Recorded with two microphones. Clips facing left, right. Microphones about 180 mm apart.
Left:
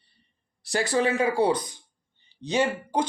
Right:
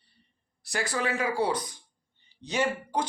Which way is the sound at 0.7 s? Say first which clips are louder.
Left 6 dB; 25° left (ahead or behind).